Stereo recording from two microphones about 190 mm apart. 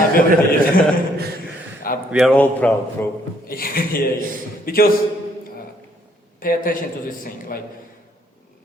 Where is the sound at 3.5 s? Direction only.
50° left (ahead or behind).